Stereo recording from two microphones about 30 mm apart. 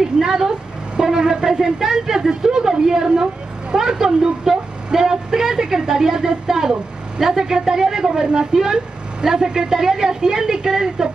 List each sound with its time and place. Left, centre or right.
0.0 s a woman's voice: centre